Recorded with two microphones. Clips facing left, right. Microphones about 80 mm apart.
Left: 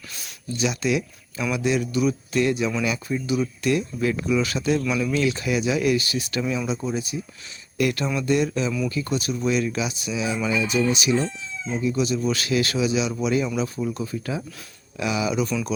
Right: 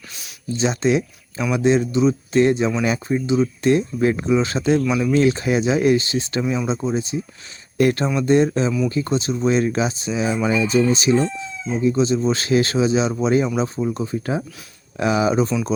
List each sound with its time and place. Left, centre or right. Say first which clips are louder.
0.1 s a sound: even; centre
0.6 s speech: right 5 dB; right
3.2 s speech: right 5 dB; right
5.1 s speech: right 6 dB; right